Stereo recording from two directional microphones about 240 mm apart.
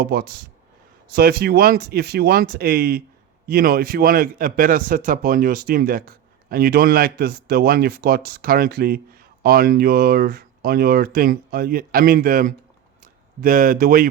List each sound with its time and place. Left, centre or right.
0.0 s a man's voice: right